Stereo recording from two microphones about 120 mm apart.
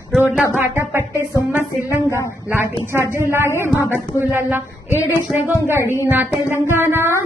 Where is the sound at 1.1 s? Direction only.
25° left (ahead or behind).